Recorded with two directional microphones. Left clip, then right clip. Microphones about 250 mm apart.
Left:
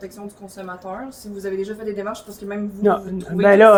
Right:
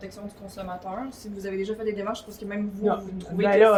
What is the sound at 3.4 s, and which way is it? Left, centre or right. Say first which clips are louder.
Speech: left 7 dB; left.